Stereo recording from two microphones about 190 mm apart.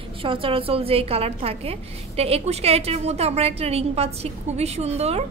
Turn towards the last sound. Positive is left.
turn(degrees=-35)  # may be behind; listen again after turning